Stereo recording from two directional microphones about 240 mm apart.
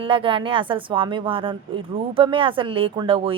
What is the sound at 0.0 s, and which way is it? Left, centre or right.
A woman's voice, right.